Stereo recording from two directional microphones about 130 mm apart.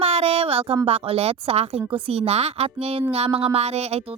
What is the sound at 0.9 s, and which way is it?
Speech, 50° right (ahead or behind).